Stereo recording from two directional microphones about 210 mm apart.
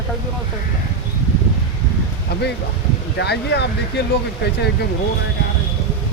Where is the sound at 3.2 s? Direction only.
55° left (ahead or behind).